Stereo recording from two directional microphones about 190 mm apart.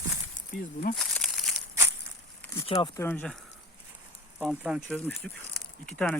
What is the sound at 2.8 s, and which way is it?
Speech, 15° left (ahead or behind).